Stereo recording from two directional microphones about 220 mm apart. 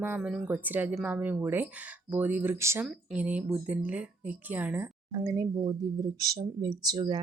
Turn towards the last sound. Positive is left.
turn(degrees=-20)  # may be behind; listen again after turning